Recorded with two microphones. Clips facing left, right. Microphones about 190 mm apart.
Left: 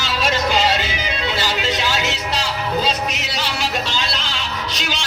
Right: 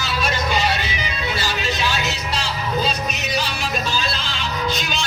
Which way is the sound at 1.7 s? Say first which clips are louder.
Left 2 dB; 85° left.